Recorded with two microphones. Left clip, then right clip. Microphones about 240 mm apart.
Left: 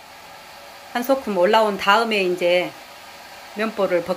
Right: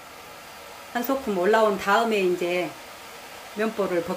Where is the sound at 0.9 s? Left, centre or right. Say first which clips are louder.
Left 6 dB; centre.